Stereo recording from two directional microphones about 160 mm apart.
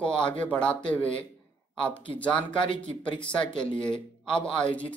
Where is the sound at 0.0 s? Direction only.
5° left (ahead or behind).